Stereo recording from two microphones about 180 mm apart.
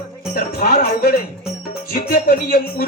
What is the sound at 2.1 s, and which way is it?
Speech, 55° left (ahead or behind).